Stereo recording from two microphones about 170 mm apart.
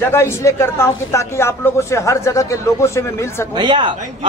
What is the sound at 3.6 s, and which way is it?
Speech, 25° right (ahead or behind).